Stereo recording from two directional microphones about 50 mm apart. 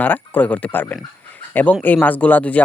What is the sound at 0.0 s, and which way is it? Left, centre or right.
Speech, left.